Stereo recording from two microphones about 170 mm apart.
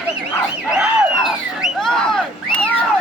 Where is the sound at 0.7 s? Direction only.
5° right (ahead or behind).